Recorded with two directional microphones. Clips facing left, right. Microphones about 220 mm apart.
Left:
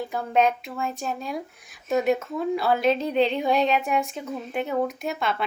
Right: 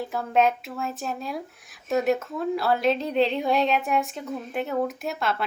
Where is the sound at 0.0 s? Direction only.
Centre (ahead or behind).